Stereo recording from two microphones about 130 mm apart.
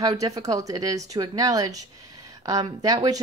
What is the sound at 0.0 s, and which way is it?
Speech, 25° right (ahead or behind).